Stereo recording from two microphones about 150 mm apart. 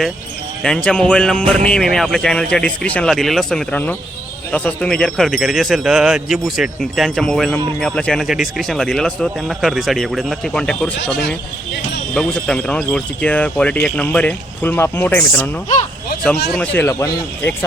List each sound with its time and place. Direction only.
0.6 s a man's voice: 5° left (ahead or behind)
16.5 s a man's voice: 10° left (ahead or behind)